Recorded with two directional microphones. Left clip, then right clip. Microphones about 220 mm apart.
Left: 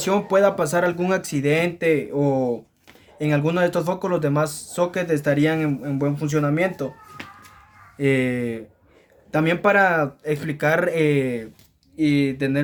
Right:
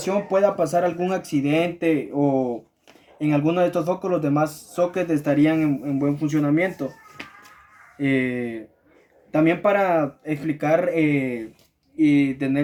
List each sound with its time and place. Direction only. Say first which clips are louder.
0.0 s speech: left 2 dB; 40° left (ahead or behind)
7.9 s speech: left 2 dB; 55° left (ahead or behind)